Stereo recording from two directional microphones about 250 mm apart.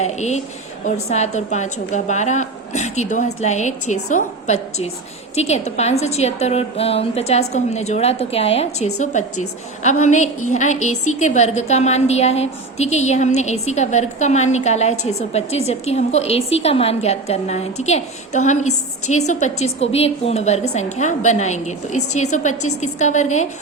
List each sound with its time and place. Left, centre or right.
0.0 s a woman's voice: left